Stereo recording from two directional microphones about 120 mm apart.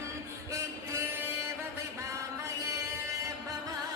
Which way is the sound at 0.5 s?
25° right (ahead or behind).